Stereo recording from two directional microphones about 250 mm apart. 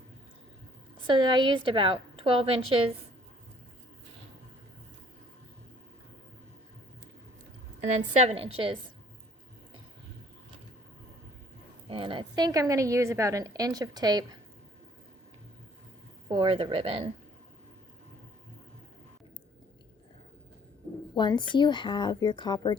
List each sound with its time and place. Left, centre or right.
1.0 s a woman's voice: centre
8.1 s a woman's voice: right
11.9 s a woman's voice: right
16.3 s a woman's voice: right
21.2 s speech: centre